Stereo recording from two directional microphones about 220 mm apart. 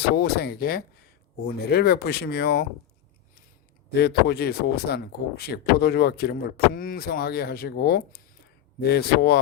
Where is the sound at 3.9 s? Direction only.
45° left (ahead or behind).